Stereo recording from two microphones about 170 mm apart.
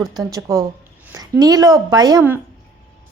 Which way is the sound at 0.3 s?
20° right (ahead or behind).